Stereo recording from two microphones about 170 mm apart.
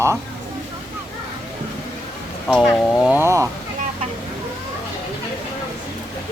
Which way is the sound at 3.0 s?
10° right (ahead or behind).